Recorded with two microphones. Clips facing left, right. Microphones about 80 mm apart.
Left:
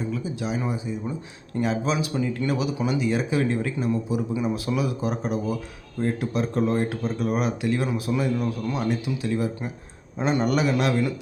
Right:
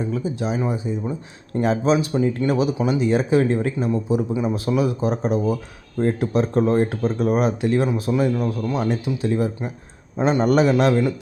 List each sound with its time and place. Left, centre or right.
0.1 s speech: right